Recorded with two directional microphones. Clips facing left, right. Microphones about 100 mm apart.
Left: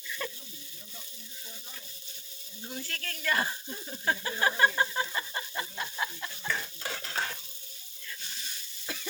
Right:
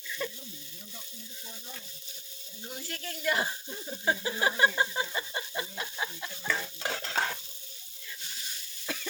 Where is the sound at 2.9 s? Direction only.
15° right (ahead or behind).